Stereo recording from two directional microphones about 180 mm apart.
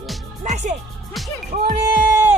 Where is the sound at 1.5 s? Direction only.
50° right (ahead or behind).